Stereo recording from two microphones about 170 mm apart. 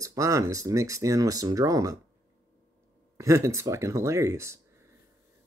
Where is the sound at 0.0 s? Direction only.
20° right (ahead or behind).